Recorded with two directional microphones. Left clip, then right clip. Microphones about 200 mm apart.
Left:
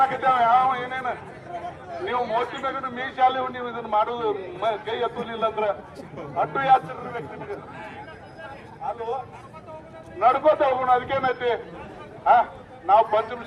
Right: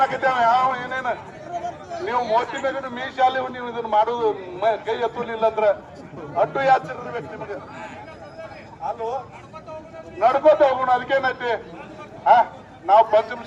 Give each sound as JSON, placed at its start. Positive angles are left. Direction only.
{"t": 0.0, "sound": "a sound", "side_deg": -10}
{"t": 1.6, "sound": "chatter", "side_deg": -60}
{"t": 2.3, "sound": "a man's voice", "side_deg": -10}
{"t": 8.8, "sound": "a man's voice", "side_deg": -5}
{"t": 10.2, "sound": "a man's voice", "side_deg": -10}